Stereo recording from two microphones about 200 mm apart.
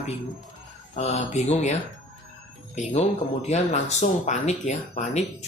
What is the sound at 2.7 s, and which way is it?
Speech, 35° left (ahead or behind).